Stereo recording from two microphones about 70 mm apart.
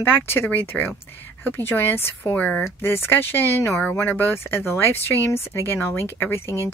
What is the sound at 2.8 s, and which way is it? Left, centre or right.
Speech, left.